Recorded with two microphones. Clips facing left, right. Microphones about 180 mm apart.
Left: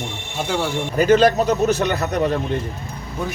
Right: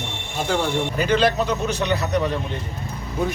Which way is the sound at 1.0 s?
45° left (ahead or behind).